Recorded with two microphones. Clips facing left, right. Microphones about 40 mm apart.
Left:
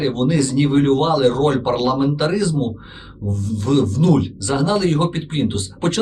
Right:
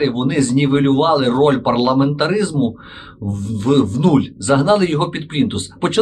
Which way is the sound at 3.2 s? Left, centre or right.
Right.